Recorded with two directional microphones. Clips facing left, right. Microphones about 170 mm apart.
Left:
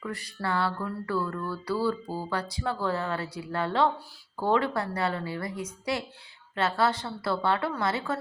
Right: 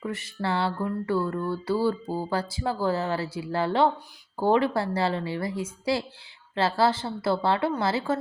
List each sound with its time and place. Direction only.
0.0 s mantra: 25° right (ahead or behind)